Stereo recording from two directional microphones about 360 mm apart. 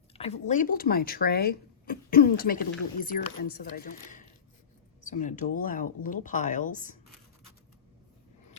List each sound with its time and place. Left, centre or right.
0.1 s speech: centre